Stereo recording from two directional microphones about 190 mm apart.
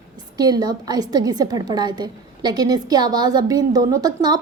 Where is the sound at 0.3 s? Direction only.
20° right (ahead or behind).